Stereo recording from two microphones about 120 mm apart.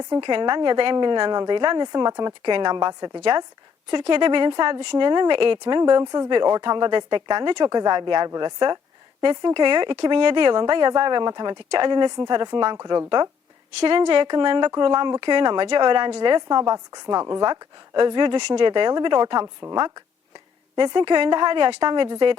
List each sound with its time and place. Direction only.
0.1 s speech: 40° right (ahead or behind)
3.8 s speech: 45° right (ahead or behind)
20.7 s speech: 40° right (ahead or behind)